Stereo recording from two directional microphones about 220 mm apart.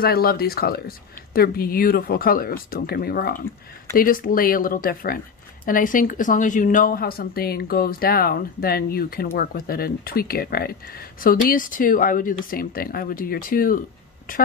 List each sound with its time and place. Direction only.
0.0 s a woman's voice: 45° left (ahead or behind)